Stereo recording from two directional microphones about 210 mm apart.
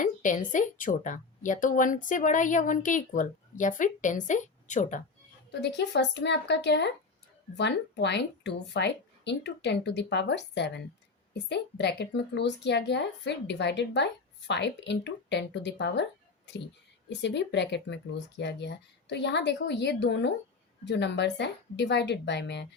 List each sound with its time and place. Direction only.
0.0 s a woman's voice: 40° left (ahead or behind)
5.5 s a woman's voice: 55° left (ahead or behind)
17.1 s a woman's voice: 55° left (ahead or behind)